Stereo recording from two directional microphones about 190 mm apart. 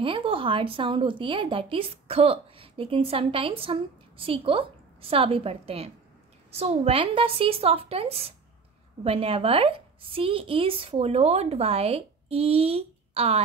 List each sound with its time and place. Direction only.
0.0 s a woman's voice: 25° right (ahead or behind)